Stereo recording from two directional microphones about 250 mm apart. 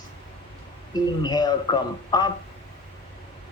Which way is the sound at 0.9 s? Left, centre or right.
Centre.